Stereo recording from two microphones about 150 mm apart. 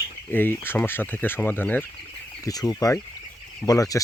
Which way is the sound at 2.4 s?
25° left (ahead or behind).